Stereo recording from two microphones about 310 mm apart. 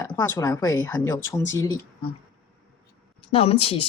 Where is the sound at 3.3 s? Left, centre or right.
Centre.